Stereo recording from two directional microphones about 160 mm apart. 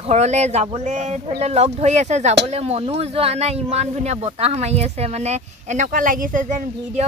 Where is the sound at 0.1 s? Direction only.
45° right (ahead or behind).